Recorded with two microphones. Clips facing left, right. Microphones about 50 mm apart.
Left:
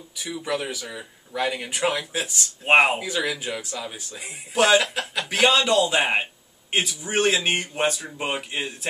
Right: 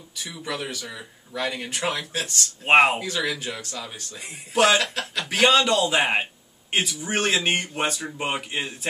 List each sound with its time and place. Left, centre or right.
0.2 s speech: centre